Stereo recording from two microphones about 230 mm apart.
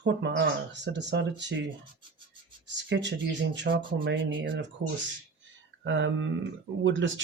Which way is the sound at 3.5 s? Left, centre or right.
Right.